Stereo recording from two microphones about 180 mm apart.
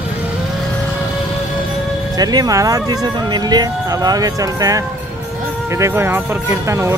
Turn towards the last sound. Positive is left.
turn(degrees=-15)  # may be behind; listen again after turning